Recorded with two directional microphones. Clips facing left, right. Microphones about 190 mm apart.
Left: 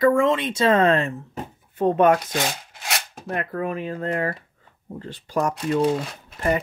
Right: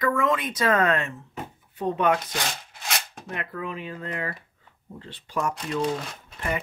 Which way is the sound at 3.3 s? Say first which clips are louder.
Left 7 dB; 45° left (ahead or behind).